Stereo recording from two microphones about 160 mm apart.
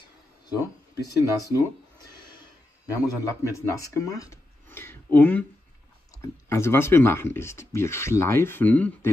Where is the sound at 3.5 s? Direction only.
20° left (ahead or behind).